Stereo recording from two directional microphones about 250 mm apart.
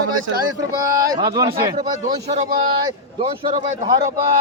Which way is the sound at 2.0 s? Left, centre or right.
Right.